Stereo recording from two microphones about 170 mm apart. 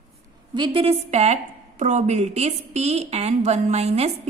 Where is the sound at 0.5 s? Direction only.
30° right (ahead or behind).